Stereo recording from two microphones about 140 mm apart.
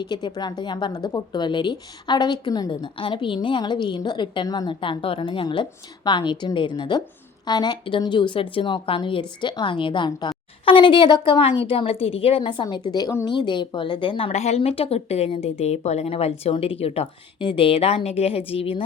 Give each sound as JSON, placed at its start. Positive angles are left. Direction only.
{"t": 0.0, "sound": "a woman's voice", "side_deg": 30}